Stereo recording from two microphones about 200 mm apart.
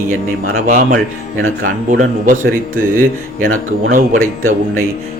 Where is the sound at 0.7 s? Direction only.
45° right (ahead or behind).